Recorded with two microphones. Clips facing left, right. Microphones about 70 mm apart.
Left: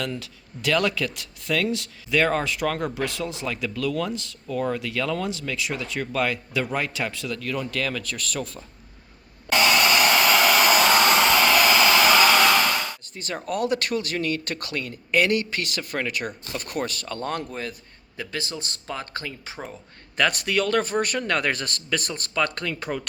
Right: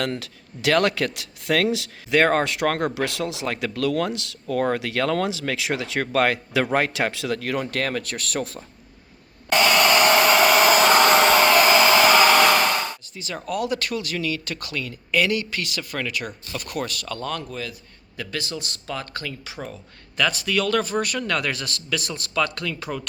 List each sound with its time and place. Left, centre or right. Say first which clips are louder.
0.0 s speech: right 3 dB; right
2.1 s speech: right 3 dB; right
6.1 s speech: right 5 dB; right
9.6 s hair dryer: right 3 dB; right
10.5 s vehicle: right 3 dB; right
13.3 s speech: left 1 dB; left
18.2 s speech: right 1 dB; left
20.1 s speech: even; left